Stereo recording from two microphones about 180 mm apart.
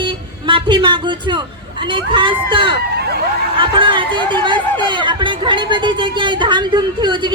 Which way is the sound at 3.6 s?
30° right (ahead or behind).